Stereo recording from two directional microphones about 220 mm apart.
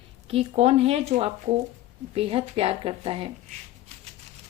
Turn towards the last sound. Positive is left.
turn(degrees=-25)  # may be behind; listen again after turning